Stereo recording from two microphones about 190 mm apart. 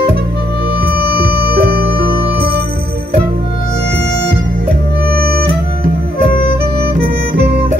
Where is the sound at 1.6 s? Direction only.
55° right (ahead or behind).